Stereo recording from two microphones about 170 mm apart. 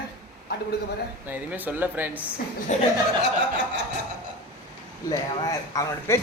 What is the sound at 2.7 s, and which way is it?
Speech, 45° left (ahead or behind).